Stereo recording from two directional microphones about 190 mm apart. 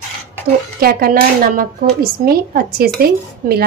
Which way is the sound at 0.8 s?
50° right (ahead or behind).